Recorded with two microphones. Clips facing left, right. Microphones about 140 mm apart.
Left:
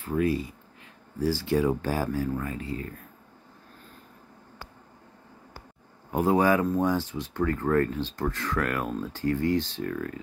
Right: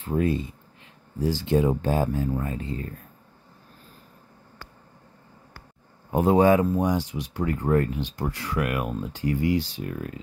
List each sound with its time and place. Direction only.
0.0 s speech: 25° right (ahead or behind)
6.1 s speech: 20° right (ahead or behind)